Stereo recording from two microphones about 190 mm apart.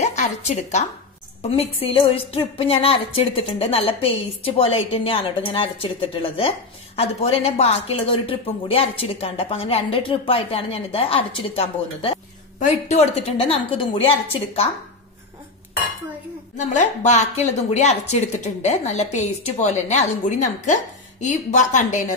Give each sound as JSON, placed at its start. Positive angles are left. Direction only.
{"t": 0.0, "sound": "a woman's voice", "side_deg": 35}
{"t": 16.5, "sound": "speech", "side_deg": 40}